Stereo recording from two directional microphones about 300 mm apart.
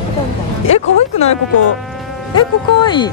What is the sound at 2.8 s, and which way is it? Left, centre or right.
Speech, centre.